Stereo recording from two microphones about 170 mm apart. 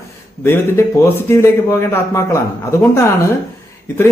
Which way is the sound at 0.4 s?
15° left (ahead or behind).